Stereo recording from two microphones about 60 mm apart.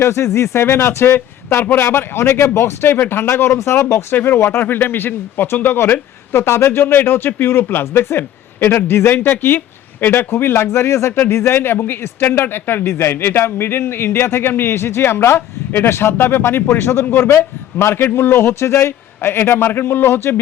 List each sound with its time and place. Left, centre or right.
0.0 s a man's voice: left
4.6 s a man's voice: left